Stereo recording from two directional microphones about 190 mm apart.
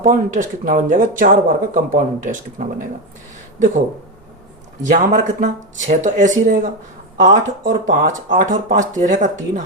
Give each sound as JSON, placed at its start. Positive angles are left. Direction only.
{"t": 0.0, "sound": "speech", "side_deg": -45}
{"t": 4.9, "sound": "speech", "side_deg": -40}